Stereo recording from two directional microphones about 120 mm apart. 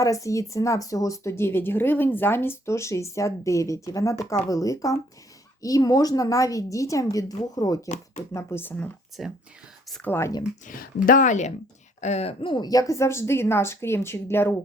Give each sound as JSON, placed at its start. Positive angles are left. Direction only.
{"t": 0.0, "sound": "speech", "side_deg": 25}
{"t": 9.2, "sound": "speech", "side_deg": 0}
{"t": 10.0, "sound": "speech", "side_deg": 20}
{"t": 11.2, "sound": "speech", "side_deg": 85}
{"t": 11.9, "sound": "speech", "side_deg": 70}
{"t": 12.4, "sound": "speech", "side_deg": 40}